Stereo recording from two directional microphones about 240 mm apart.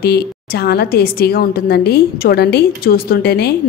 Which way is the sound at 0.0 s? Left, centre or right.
Left.